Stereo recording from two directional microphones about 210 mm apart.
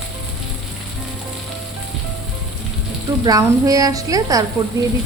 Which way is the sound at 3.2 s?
15° right (ahead or behind).